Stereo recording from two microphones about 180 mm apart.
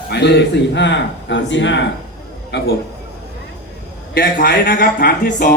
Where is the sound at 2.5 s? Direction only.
75° left (ahead or behind).